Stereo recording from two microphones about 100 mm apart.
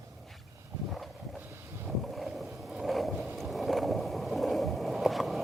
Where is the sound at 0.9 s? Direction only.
Centre (ahead or behind).